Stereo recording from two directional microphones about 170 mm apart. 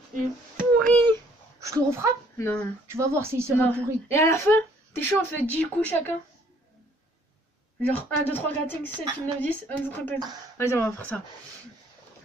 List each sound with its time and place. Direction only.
0.7 s a woman's voice: 10° left (ahead or behind)
1.6 s a child's voice: 15° right (ahead or behind)
2.3 s speech: 15° left (ahead or behind)
2.9 s speech: 15° right (ahead or behind)
3.5 s a woman's voice: 15° left (ahead or behind)
7.8 s a woman's voice: 10° left (ahead or behind)
10.1 s speech: 25° right (ahead or behind)
10.6 s a woman's voice: 15° left (ahead or behind)